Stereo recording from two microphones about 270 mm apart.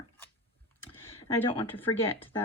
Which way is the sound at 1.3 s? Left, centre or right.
Centre.